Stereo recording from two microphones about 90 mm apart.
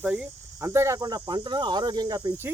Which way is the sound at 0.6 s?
30° right (ahead or behind).